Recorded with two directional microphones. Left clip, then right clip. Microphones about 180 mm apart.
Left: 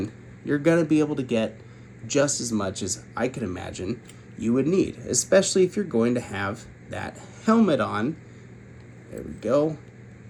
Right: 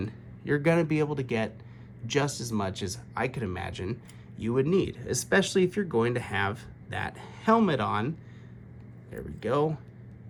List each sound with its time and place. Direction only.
0.4 s speech: 40° right (ahead or behind)
9.4 s speech: 35° right (ahead or behind)